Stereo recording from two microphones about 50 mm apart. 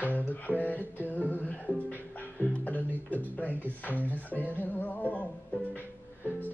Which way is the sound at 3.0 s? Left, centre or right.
Left.